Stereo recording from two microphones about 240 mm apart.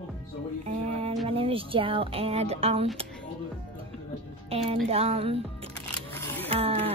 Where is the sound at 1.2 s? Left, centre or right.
Right.